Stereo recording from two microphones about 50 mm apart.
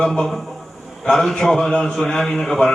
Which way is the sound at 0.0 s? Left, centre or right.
Centre.